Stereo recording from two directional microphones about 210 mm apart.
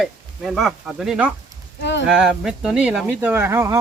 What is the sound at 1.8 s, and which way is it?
Speech, 55° left (ahead or behind).